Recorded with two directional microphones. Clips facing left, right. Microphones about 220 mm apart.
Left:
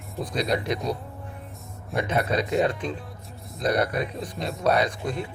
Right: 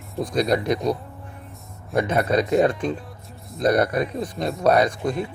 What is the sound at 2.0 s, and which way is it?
Speech, 45° right (ahead or behind).